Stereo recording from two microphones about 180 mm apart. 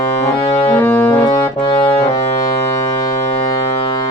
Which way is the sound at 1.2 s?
25° left (ahead or behind).